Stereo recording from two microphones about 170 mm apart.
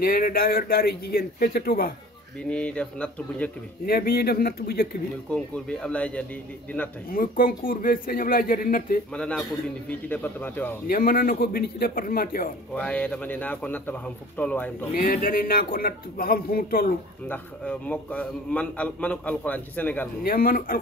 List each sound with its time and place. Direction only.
0.0 s speech: 60° left (ahead or behind)
2.5 s a man's voice: 5° left (ahead or behind)
3.8 s speech: 60° left (ahead or behind)
5.3 s a man's voice: 5° left (ahead or behind)
7.1 s speech: 55° left (ahead or behind)
9.1 s a man's voice: 5° left (ahead or behind)
10.9 s speech: 55° left (ahead or behind)
12.7 s a man's voice: 10° left (ahead or behind)
15.0 s speech: 50° left (ahead or behind)
17.3 s a man's voice: 10° left (ahead or behind)
20.2 s speech: 60° left (ahead or behind)